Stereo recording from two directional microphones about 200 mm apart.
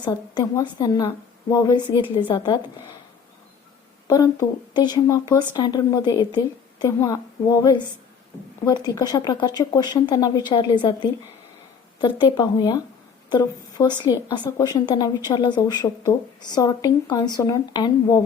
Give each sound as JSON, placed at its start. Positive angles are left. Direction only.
{"t": 0.0, "sound": "a woman's voice", "side_deg": 20}
{"t": 4.0, "sound": "a woman's voice", "side_deg": 20}